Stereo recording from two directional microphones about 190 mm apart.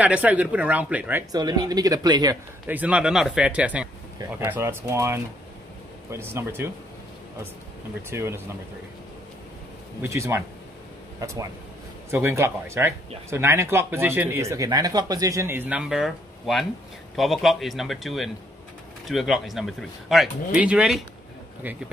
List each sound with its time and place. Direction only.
0.0 s speech: 10° right (ahead or behind)
1.3 s speech: 20° right (ahead or behind)
2.6 s speech: 10° right (ahead or behind)
8.1 s speech: 15° right (ahead or behind)
10.0 s speech: 15° right (ahead or behind)